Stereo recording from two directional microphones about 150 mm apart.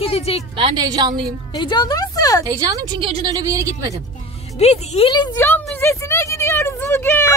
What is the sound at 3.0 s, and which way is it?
Speech, 40° right (ahead or behind).